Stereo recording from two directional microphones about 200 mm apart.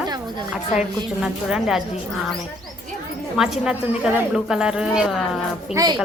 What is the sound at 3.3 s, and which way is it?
A woman's voice, 5° right (ahead or behind).